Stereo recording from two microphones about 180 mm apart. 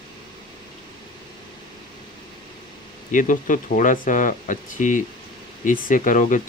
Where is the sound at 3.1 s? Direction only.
45° left (ahead or behind).